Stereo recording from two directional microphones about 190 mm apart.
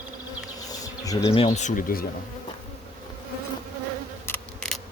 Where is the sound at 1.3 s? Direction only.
30° left (ahead or behind); by 2.0 s 45° left (ahead or behind).